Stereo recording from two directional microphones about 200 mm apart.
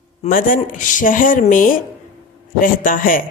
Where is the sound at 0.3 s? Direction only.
45° left (ahead or behind).